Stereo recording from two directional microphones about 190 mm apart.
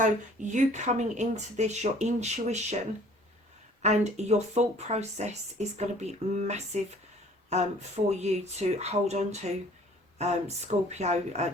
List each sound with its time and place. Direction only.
0.0 s speech: 40° right (ahead or behind)
3.8 s speech: 35° right (ahead or behind)